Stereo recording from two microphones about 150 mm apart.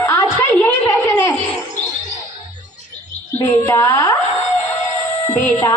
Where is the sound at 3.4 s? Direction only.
15° left (ahead or behind).